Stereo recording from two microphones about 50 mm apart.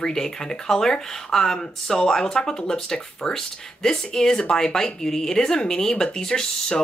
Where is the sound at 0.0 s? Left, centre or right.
Centre.